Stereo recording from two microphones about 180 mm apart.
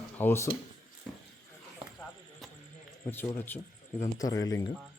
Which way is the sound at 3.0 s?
15° left (ahead or behind).